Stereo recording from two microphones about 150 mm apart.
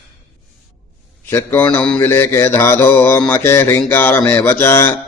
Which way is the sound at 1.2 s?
15° left (ahead or behind).